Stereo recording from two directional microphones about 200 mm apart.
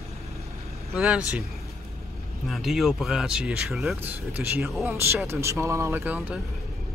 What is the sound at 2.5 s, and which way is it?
Speech, centre (ahead or behind).